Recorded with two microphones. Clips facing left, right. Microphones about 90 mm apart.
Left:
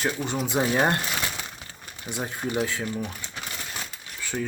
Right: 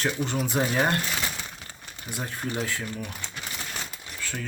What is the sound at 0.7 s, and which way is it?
Speech, 20° left (ahead or behind).